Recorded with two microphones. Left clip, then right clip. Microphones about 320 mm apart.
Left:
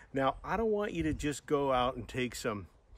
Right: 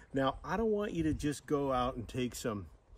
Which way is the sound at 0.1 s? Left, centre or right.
Centre.